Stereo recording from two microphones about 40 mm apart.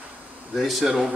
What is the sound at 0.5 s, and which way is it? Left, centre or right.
Speech, centre.